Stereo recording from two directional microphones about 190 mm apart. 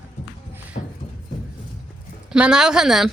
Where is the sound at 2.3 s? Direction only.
5° right (ahead or behind).